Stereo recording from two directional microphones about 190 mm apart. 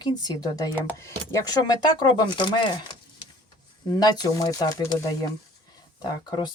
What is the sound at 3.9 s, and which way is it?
Speech, 20° left (ahead or behind).